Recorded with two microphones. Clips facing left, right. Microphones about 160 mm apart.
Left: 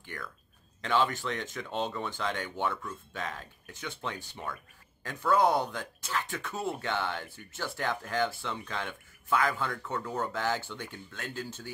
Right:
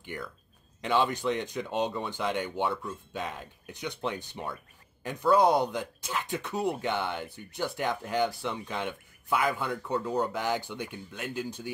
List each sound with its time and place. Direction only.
0.0 s speech: 15° right (ahead or behind)